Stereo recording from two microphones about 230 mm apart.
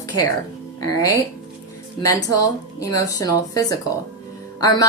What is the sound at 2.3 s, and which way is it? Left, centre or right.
Speech, centre.